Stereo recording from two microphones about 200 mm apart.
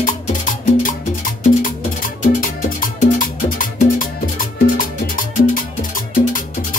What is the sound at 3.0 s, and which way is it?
Music, 40° left (ahead or behind).